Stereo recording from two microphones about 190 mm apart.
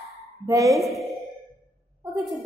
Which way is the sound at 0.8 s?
Centre (ahead or behind).